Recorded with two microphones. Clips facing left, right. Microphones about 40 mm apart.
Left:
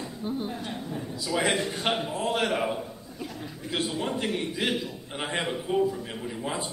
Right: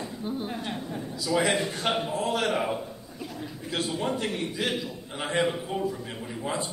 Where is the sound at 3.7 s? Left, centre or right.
Centre.